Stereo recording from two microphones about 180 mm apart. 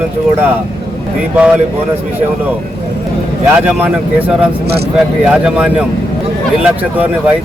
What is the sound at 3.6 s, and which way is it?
Speech, 10° right (ahead or behind).